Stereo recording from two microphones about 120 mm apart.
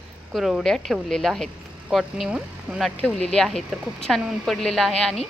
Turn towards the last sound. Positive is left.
turn(degrees=5)  # may be behind; listen again after turning